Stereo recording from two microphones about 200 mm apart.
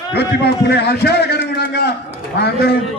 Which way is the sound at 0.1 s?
55° left (ahead or behind).